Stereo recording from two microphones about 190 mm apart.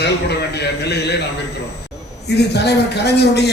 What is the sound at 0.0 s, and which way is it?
Speech, 60° left (ahead or behind).